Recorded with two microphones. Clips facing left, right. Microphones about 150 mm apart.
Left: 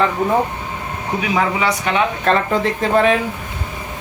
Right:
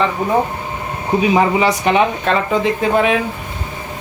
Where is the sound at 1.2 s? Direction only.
30° right (ahead or behind).